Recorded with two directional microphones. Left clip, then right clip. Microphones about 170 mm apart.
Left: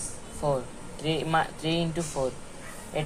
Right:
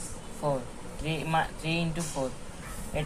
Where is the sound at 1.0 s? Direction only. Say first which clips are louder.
Left 3 dB; 45° left (ahead or behind).